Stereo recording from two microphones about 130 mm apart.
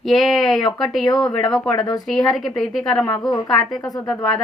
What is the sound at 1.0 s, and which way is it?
Speech, 30° left (ahead or behind).